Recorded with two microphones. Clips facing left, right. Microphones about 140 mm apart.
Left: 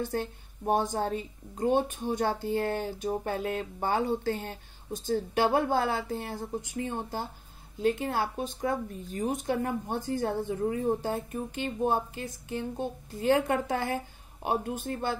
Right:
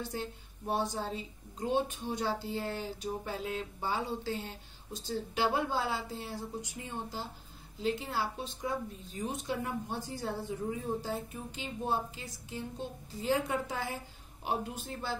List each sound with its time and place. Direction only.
0.0 s speech: 55° left (ahead or behind)